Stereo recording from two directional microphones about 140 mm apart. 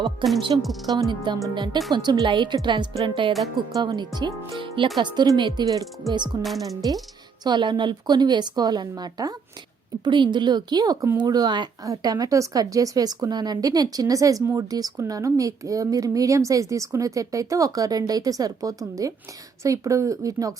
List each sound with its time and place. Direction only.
0.5 s a woman's voice: 35° right (ahead or behind)